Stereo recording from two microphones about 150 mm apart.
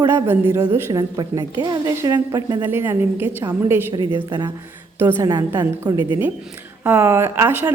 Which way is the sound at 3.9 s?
30° right (ahead or behind).